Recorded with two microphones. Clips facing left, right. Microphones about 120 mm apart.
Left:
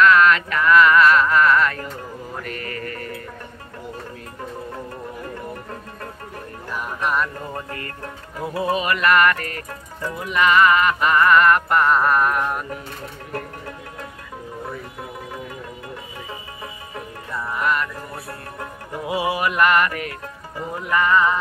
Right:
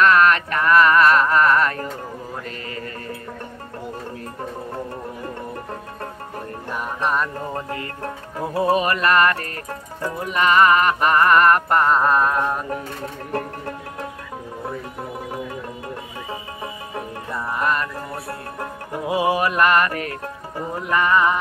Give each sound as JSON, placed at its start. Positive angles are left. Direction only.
{"t": 0.0, "sound": "music", "side_deg": -40}
{"t": 2.4, "sound": "music", "side_deg": -25}
{"t": 7.0, "sound": "music", "side_deg": -30}
{"t": 13.3, "sound": "music", "side_deg": -40}
{"t": 17.6, "sound": "music", "side_deg": -35}
{"t": 19.4, "sound": "music", "side_deg": -30}
{"t": 20.9, "sound": "music", "side_deg": -15}